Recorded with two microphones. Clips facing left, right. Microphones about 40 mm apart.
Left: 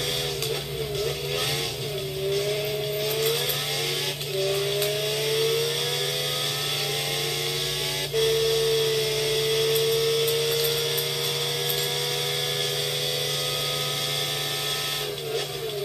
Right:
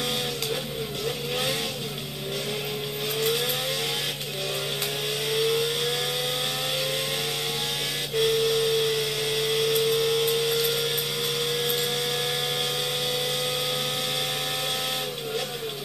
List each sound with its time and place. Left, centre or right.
8.2 s steam whistle: right
9.3 s vehicle: centre
9.7 s a sound: right